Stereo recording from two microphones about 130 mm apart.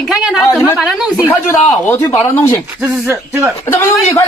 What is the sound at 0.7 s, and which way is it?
Speech, 5° right (ahead or behind).